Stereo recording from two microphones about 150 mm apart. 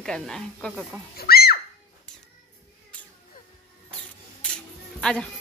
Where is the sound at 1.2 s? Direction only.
90° left.